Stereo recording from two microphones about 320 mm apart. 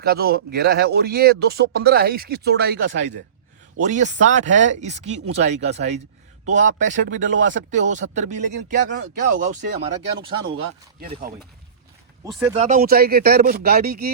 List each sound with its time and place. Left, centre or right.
0.0 s speech: right
7.2 s speech: right
7.7 s speech: right
12.3 s speech: centre
12.5 s speech: right